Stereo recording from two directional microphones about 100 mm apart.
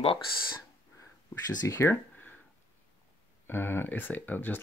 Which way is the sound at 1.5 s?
30° left (ahead or behind).